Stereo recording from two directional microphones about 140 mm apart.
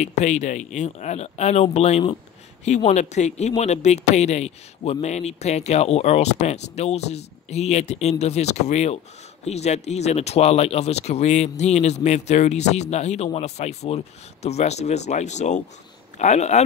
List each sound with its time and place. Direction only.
0.0 s speech: 55° left (ahead or behind)